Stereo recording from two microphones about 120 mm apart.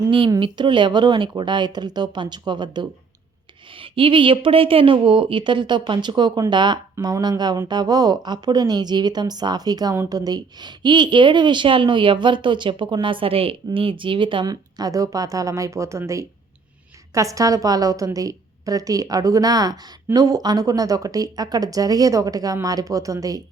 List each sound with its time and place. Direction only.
0.3 s a woman's voice: 45° right (ahead or behind)
14.5 s a woman's voice: 30° right (ahead or behind)